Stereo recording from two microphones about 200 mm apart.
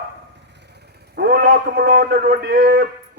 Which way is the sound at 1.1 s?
50° right (ahead or behind).